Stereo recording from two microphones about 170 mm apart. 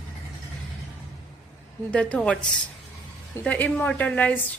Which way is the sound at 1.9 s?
5° left (ahead or behind).